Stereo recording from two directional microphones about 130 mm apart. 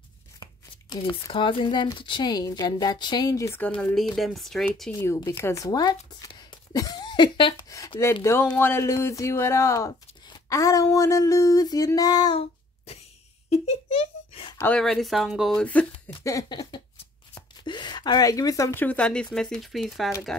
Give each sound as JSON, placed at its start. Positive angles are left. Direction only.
{"t": 0.4, "sound": "speech", "side_deg": 35}
{"t": 3.6, "sound": "speech", "side_deg": 10}
{"t": 5.0, "sound": "speech", "side_deg": 20}
{"t": 8.0, "sound": "speech", "side_deg": 20}
{"t": 12.4, "sound": "a sound", "side_deg": 50}
{"t": 14.6, "sound": "speech", "side_deg": 5}
{"t": 15.6, "sound": "speech", "side_deg": 10}
{"t": 16.5, "sound": "speech", "side_deg": 35}